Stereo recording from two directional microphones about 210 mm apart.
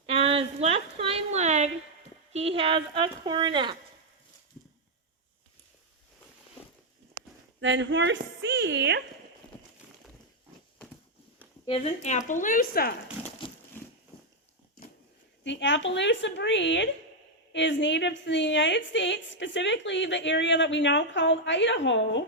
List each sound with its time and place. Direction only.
0.0 s a sound: 25° right (ahead or behind)
2.3 s speech: 30° right (ahead or behind)
7.6 s a woman's voice: 60° right (ahead or behind)
11.6 s a woman's voice: 25° left (ahead or behind); by 12.9 s 45° left (ahead or behind)
13.4 s crumpling: 25° left (ahead or behind)
15.4 s a woman's voice: 60° left (ahead or behind)